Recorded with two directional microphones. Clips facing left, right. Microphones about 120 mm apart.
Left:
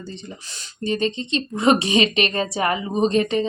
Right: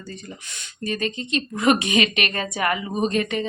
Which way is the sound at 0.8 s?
30° left (ahead or behind).